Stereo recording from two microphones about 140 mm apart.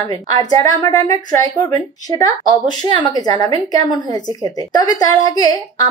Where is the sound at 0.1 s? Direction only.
25° left (ahead or behind).